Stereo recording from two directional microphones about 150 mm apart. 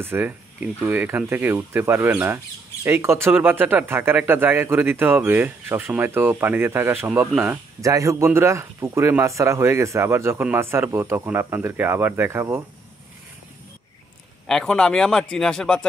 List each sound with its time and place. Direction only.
0.0 s speech: 15° right (ahead or behind)
14.5 s speech: 5° left (ahead or behind)